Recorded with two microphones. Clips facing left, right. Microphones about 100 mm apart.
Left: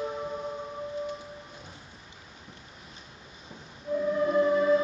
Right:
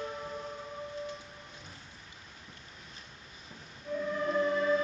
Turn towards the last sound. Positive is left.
turn(degrees=15)  # may be behind; listen again after turning